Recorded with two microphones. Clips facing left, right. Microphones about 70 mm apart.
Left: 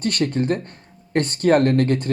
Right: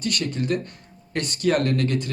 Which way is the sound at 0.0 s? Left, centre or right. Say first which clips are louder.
Left 5 dB; left.